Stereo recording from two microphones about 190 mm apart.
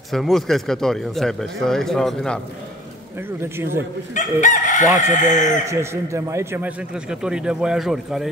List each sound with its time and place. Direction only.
0.1 s a man's voice: centre (ahead or behind)
3.2 s speech: 15° right (ahead or behind)
4.1 s chicken: 40° left (ahead or behind)
5.7 s a man's voice: 15° right (ahead or behind)